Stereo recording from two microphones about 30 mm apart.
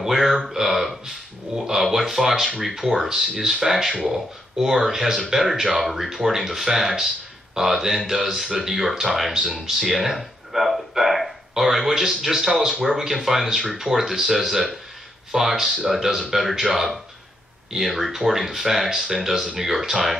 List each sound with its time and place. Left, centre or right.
0.0 s a sound: centre
0.5 s speech: centre
9.3 s speech: centre
9.8 s speech: centre